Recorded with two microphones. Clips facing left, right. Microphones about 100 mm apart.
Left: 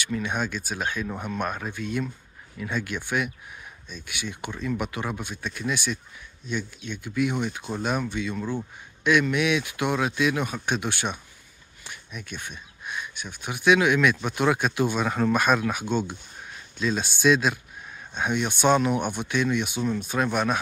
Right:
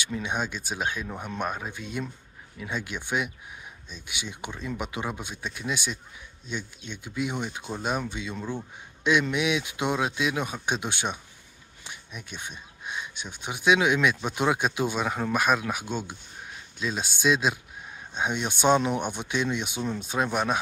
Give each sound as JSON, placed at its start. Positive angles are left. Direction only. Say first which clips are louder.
{"t": 0.0, "sound": "speech", "louder": "left 2 dB", "side_deg": -20}